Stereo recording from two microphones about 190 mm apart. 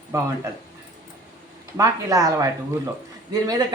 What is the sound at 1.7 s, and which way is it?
Speech, 15° right (ahead or behind).